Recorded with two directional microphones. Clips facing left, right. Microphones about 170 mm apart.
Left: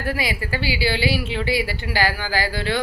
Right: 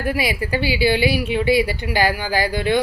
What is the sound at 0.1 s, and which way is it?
A woman's voice, 20° right (ahead or behind).